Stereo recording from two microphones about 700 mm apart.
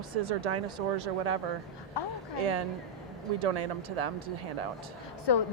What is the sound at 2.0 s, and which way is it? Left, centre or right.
Speech, left.